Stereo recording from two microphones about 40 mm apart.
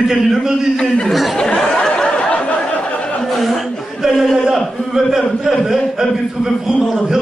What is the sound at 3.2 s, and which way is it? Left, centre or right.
Chuckle, centre.